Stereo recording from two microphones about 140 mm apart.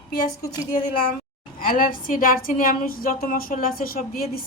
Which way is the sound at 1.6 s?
80° left.